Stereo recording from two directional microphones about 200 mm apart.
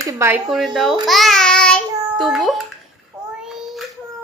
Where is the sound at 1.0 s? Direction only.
Centre (ahead or behind).